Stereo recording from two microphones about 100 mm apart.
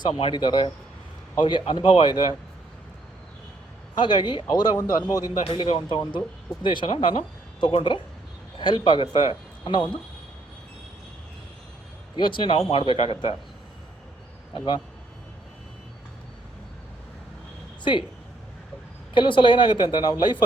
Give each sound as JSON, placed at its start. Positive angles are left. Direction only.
{"t": 0.3, "sound": "speech", "side_deg": 50}
{"t": 3.9, "sound": "speech", "side_deg": 50}
{"t": 5.4, "sound": "speech", "side_deg": 70}
{"t": 12.1, "sound": "speech", "side_deg": 50}
{"t": 14.5, "sound": "speech", "side_deg": 50}
{"t": 19.1, "sound": "speech", "side_deg": 55}